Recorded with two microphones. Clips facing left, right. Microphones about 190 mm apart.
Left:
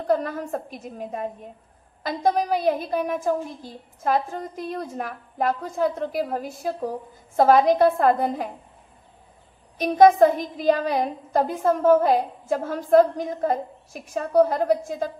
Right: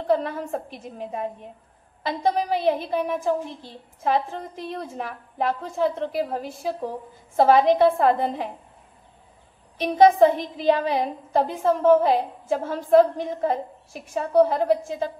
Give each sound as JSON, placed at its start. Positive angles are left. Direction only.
{"t": 0.0, "sound": "a woman's voice", "side_deg": 45}
{"t": 9.8, "sound": "a woman's voice", "side_deg": 45}